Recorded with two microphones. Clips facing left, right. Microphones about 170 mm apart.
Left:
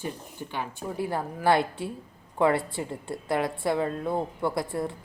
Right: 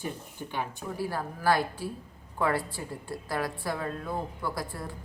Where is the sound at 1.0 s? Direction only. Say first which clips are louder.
Left 3 dB; 20° left (ahead or behind).